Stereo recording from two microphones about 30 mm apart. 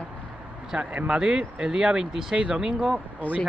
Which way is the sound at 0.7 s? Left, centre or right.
Right.